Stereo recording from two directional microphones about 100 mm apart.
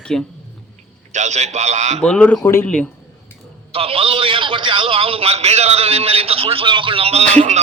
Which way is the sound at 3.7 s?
75° right (ahead or behind).